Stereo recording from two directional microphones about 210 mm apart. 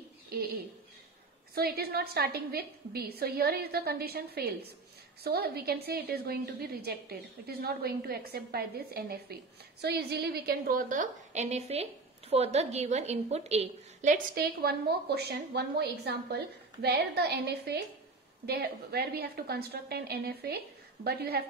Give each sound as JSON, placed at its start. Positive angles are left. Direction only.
{"t": 1.5, "sound": "a woman's voice", "side_deg": -45}